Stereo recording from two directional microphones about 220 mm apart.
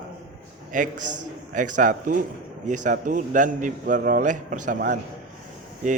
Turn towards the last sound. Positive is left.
turn(degrees=-35)  # may be behind; listen again after turning